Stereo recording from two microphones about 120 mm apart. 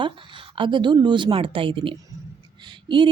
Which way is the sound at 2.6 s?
40° right (ahead or behind).